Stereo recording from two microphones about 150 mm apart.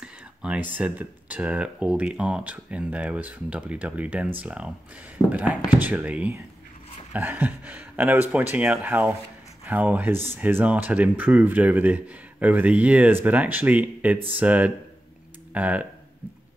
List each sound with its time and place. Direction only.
0.0 s speech: 5° right (ahead or behind)